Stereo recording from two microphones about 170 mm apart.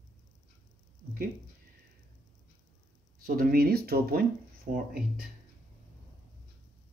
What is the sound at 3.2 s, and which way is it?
Speech, 60° right (ahead or behind).